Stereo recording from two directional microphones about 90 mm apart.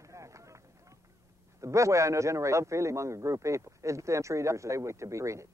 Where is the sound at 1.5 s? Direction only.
35° right (ahead or behind).